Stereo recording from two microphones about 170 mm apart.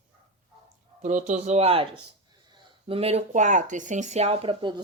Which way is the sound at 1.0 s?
45° right (ahead or behind).